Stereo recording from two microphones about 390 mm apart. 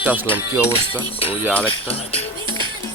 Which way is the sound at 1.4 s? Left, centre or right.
Centre.